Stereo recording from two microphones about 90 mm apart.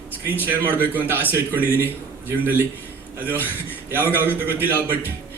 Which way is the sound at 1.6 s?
25° left (ahead or behind).